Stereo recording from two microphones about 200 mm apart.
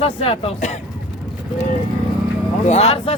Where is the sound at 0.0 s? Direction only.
25° left (ahead or behind).